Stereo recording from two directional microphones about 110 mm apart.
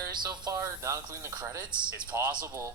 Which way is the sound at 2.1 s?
20° right (ahead or behind).